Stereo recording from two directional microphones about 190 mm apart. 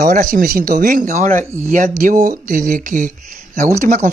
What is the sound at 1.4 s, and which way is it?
Speech, 15° right (ahead or behind).